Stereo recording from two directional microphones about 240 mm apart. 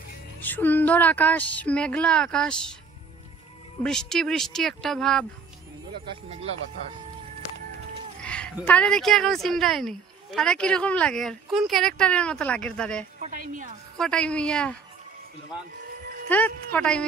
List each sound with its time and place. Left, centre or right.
0.4 s speech: centre
3.8 s speech: centre
8.2 s speech: centre
13.2 s a woman's voice: right
13.9 s speech: centre
16.3 s speech: centre